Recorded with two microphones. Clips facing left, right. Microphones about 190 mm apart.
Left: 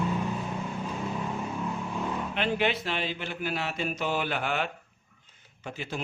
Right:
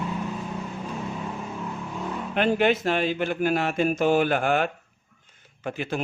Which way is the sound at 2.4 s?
50° right (ahead or behind).